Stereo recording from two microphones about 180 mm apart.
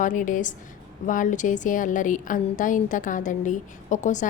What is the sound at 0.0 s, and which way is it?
A woman's voice, 45° left (ahead or behind).